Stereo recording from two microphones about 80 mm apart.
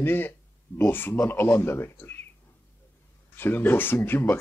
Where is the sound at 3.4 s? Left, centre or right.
Left.